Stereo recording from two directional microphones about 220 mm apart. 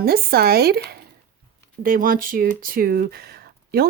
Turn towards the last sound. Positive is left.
turn(degrees=-45)  # may be behind; listen again after turning